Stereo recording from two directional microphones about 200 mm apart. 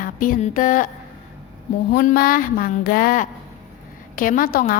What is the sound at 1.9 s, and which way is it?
Speech, 45° left (ahead or behind).